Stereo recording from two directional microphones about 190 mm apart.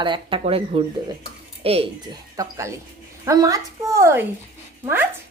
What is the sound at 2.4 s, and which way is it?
Speech, 15° right (ahead or behind).